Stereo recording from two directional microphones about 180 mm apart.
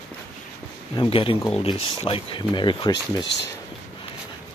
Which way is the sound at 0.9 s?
25° left (ahead or behind).